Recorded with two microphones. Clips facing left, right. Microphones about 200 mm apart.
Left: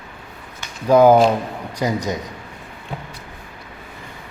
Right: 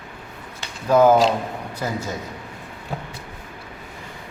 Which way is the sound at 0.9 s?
10° left (ahead or behind).